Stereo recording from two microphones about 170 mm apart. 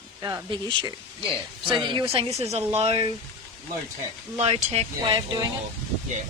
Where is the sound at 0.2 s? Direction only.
20° right (ahead or behind); by 3.1 s 35° right (ahead or behind).